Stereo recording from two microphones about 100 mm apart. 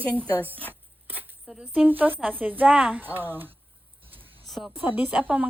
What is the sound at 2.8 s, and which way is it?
Speech, 5° right (ahead or behind).